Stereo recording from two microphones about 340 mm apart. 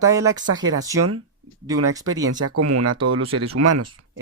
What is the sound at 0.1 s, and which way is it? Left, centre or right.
Speech, centre.